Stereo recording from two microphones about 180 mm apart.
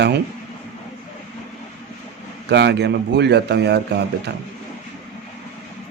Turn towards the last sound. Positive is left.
turn(degrees=-70)  # may be behind; listen again after turning